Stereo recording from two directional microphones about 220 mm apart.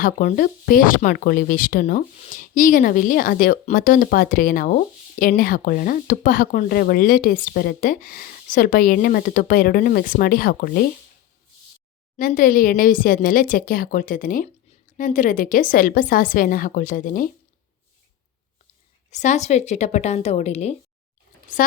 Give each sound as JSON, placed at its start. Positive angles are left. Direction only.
{"t": 0.0, "sound": "speech", "side_deg": 35}
{"t": 12.1, "sound": "speech", "side_deg": 40}
{"t": 19.1, "sound": "speech", "side_deg": 35}